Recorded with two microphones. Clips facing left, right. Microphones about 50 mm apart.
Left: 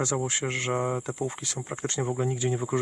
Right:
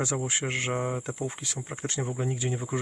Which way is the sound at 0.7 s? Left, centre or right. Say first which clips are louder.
Left 2 dB; centre.